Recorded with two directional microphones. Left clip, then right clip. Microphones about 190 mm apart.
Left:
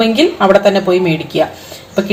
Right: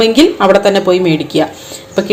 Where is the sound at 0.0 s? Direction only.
35° right (ahead or behind).